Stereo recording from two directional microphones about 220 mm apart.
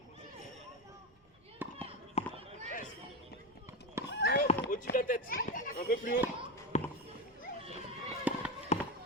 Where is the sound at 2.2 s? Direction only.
30° left (ahead or behind).